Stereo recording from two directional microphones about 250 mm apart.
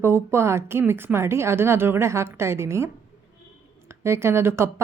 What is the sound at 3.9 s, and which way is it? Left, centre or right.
Speech, centre.